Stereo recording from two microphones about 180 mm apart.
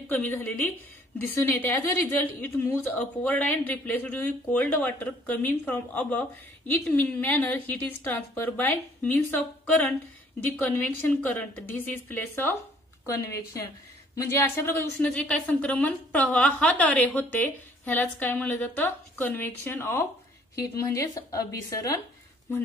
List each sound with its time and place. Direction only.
0.1 s a woman's voice: 10° left (ahead or behind)
10.4 s a woman's voice: 10° left (ahead or behind)